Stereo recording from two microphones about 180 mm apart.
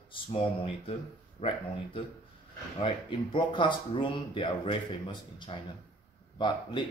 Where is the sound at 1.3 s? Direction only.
30° left (ahead or behind).